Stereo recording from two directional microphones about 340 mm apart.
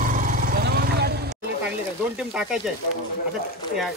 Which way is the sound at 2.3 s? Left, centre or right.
Centre.